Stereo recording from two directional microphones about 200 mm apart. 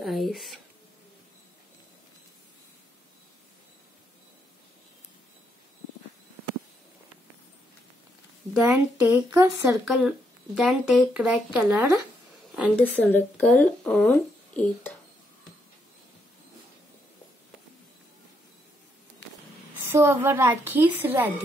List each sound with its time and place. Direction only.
0.0 s speech: centre (ahead or behind)
8.5 s speech: 10° right (ahead or behind)
12.8 s speech: 10° left (ahead or behind)
19.8 s speech: 10° right (ahead or behind)